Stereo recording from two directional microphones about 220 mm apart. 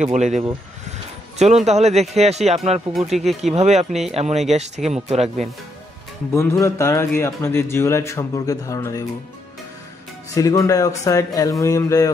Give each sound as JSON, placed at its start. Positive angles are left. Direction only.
{"t": 0.0, "sound": "speech", "side_deg": -30}
{"t": 2.9, "sound": "speech", "side_deg": 0}
{"t": 3.5, "sound": "speech", "side_deg": -30}
{"t": 6.3, "sound": "a man's voice", "side_deg": 15}
{"t": 10.3, "sound": "a man's voice", "side_deg": 15}